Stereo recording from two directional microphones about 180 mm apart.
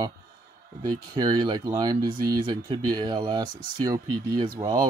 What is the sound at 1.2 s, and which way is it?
Speech, 25° right (ahead or behind).